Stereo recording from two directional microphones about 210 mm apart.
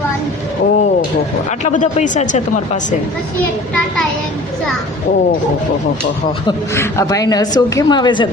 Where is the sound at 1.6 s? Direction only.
35° left (ahead or behind).